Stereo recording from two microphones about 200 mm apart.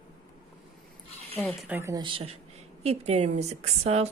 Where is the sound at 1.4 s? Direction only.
5° right (ahead or behind).